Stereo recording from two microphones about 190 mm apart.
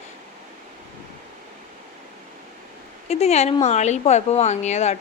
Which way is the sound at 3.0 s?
35° left (ahead or behind).